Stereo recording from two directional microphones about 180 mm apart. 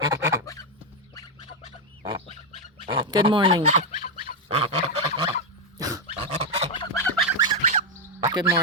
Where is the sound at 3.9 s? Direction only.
40° left (ahead or behind).